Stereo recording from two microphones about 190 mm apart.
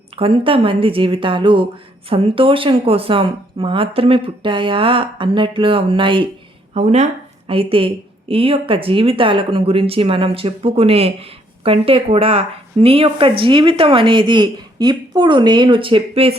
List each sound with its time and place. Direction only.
0.2 s a woman's voice: 30° right (ahead or behind)